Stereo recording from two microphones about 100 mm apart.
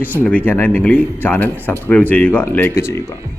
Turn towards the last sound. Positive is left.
turn(degrees=25)  # may be behind; listen again after turning